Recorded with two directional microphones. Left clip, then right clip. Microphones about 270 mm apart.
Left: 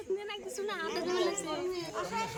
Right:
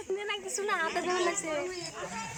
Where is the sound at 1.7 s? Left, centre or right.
Left.